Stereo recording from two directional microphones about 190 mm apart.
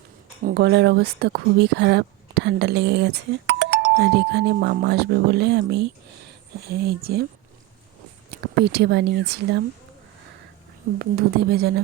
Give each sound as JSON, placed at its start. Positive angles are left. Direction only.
{"t": 0.4, "sound": "speech", "side_deg": -60}
{"t": 8.6, "sound": "speech", "side_deg": -60}
{"t": 11.0, "sound": "speech", "side_deg": -55}